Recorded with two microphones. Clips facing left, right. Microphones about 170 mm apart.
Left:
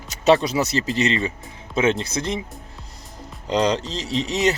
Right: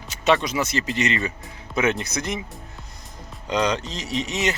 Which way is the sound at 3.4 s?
35° left (ahead or behind).